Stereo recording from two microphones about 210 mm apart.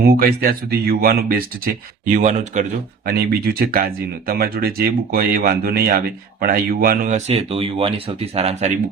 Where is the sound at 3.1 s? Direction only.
50° right (ahead or behind); by 8.7 s 30° right (ahead or behind).